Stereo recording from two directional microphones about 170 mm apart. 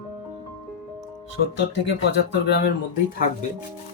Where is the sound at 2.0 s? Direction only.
85° left.